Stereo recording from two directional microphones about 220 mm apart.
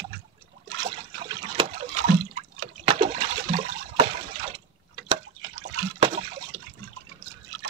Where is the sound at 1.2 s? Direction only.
25° right (ahead or behind).